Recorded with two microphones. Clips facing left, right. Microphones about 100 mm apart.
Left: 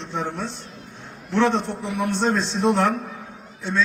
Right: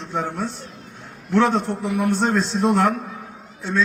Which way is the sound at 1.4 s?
40° right (ahead or behind).